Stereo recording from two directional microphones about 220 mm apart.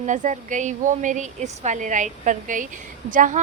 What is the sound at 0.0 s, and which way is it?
A woman's voice, 35° right (ahead or behind).